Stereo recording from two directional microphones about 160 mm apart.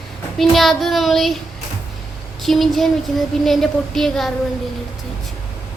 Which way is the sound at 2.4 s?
Centre (ahead or behind).